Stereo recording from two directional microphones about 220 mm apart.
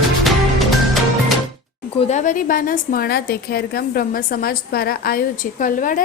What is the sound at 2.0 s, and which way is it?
A woman's voice, 30° left (ahead or behind).